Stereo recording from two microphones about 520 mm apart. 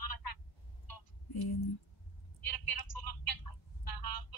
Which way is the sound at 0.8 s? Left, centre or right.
Left.